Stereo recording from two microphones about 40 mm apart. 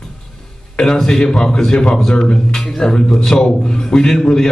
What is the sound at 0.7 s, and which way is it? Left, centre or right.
A man's voice, centre.